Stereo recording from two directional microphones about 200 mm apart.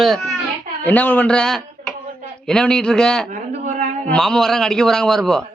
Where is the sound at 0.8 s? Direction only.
10° left (ahead or behind).